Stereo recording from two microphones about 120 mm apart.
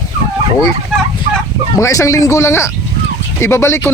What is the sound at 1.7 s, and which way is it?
Speech, 30° left (ahead or behind).